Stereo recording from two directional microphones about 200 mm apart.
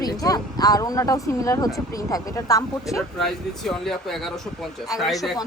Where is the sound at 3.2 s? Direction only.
Centre (ahead or behind).